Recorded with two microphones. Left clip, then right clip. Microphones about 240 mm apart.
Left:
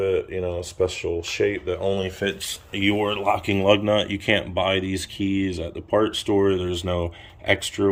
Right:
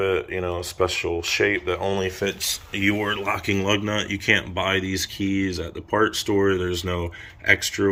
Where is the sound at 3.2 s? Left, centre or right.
Centre.